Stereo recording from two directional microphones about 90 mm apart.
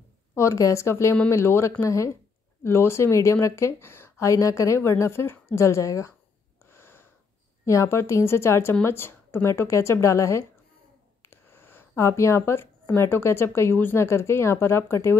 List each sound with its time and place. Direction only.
0.4 s speech: 35° left (ahead or behind)
6.6 s wheeze: 25° left (ahead or behind)
7.6 s speech: 35° left (ahead or behind)
11.2 s a sound: 25° left (ahead or behind)
12.9 s speech: 30° left (ahead or behind)